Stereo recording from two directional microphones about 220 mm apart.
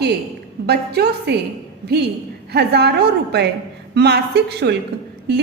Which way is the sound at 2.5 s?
50° right (ahead or behind).